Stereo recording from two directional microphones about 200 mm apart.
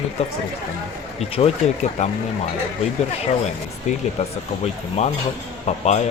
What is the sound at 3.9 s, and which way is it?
Speech, 35° left (ahead or behind).